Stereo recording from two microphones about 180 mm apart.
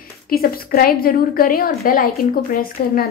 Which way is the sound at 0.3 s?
55° left (ahead or behind).